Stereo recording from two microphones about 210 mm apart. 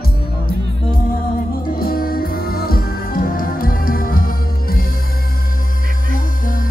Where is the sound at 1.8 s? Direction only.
45° left (ahead or behind).